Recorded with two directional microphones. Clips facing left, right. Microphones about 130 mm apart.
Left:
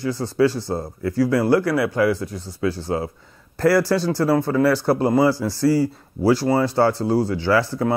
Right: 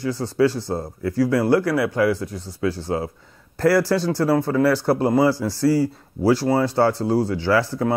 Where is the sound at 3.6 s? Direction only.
15° left (ahead or behind).